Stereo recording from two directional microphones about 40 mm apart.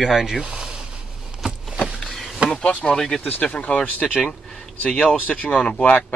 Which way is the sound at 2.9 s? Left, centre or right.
Centre.